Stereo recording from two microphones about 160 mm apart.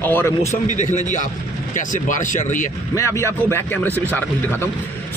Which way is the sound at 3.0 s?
20° left (ahead or behind).